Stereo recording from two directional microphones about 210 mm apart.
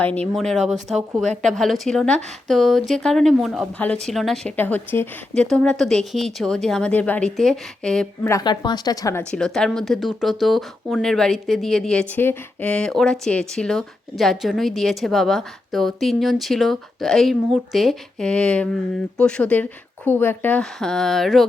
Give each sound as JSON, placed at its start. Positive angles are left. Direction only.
{"t": 0.0, "sound": "speech", "side_deg": 5}
{"t": 8.3, "sound": "a woman's voice", "side_deg": 20}
{"t": 9.3, "sound": "a woman's voice", "side_deg": 5}